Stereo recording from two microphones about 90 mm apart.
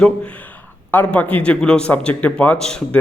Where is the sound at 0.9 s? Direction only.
20° left (ahead or behind).